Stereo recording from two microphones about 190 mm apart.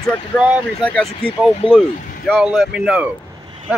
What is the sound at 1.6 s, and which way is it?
Speech, 30° left (ahead or behind).